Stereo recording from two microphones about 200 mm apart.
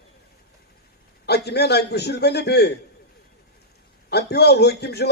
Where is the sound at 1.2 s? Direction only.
55° left (ahead or behind).